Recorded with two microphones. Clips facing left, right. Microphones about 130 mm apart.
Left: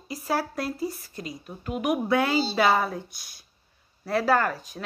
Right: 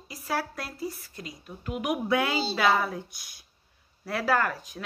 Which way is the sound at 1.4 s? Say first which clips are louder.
Left 3 dB; 25° left (ahead or behind).